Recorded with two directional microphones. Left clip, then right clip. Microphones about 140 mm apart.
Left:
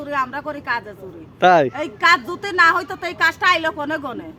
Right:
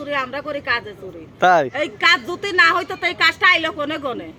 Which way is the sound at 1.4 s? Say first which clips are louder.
Left 1 dB; 30° left (ahead or behind).